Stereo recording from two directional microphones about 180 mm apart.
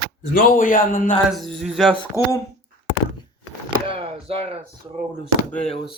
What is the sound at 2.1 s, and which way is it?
Speech, 15° left (ahead or behind).